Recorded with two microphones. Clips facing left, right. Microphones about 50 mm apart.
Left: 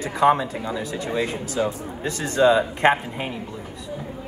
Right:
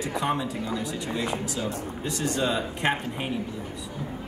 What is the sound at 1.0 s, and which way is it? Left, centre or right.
A man's voice, left.